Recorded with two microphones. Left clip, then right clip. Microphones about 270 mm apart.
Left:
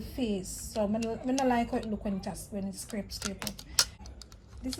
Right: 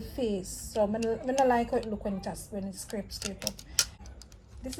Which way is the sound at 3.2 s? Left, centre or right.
Centre.